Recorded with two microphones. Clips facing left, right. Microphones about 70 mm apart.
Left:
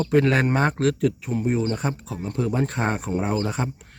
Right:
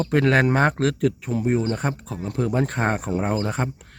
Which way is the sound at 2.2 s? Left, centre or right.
Right.